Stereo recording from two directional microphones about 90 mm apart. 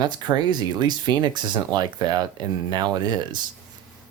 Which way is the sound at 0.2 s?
50° right (ahead or behind).